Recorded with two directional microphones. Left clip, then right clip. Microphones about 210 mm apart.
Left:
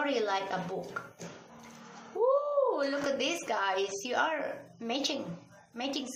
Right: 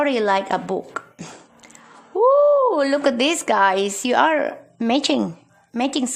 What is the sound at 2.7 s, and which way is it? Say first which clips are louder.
A woman's voice: right 13 dB; 50° right (ahead or behind).